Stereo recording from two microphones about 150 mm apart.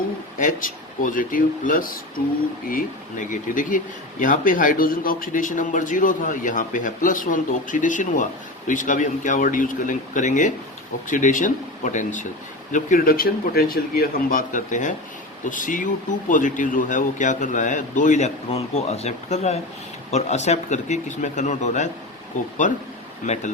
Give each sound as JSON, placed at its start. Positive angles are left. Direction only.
{"t": 0.3, "sound": "speech", "side_deg": 65}
{"t": 12.7, "sound": "speech", "side_deg": 70}